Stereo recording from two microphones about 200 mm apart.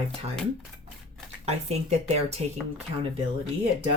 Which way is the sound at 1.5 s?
30° right (ahead or behind).